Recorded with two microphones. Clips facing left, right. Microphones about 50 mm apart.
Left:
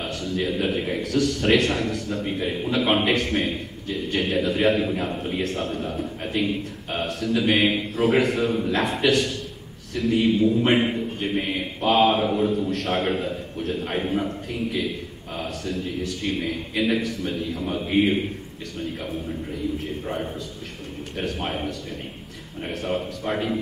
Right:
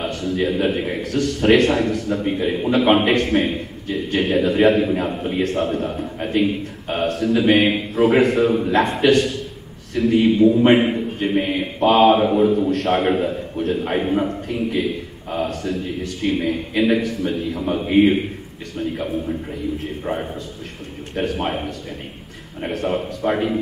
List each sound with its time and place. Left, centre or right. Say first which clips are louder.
0.1 s a man's voice: right 5 dB; centre
0.5 s a man's voice: right 4 dB; centre
1.1 s a man's voice: right 5 dB; centre
2.4 s a man's voice: right 6 dB; right
2.8 s a man's voice: right 5 dB; centre
7.1 s a man's voice: right 6 dB; centre
16.4 s a man's voice: right 5 dB; centre
17.0 s a man's voice: right 5 dB; centre
17.6 s a man's voice: right 5 dB; right
17.9 s a man's voice: right 6 dB; centre
21.2 s a man's voice: right 6 dB; centre
22.7 s a man's voice: right 5 dB; centre